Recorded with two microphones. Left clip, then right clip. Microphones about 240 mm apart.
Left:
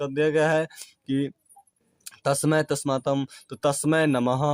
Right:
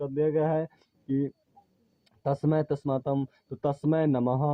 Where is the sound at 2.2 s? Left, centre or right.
Left.